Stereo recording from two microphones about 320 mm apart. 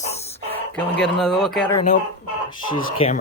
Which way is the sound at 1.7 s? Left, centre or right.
Left.